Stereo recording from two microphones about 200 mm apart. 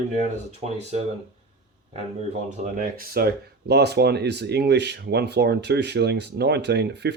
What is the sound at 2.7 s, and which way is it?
Speech, 50° right (ahead or behind).